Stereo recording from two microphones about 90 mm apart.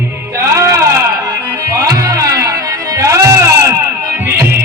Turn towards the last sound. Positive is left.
turn(degrees=-35)  # may be behind; listen again after turning